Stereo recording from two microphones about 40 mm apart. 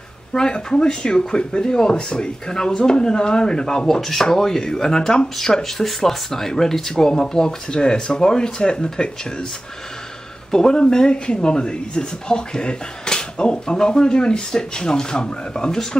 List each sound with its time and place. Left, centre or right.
0.3 s speech: centre
3.8 s speech: centre
10.5 s speech: centre